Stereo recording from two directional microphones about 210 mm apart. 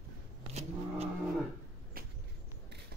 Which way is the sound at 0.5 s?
30° right (ahead or behind).